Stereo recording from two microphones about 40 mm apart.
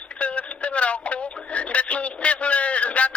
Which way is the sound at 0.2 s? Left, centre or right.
Left.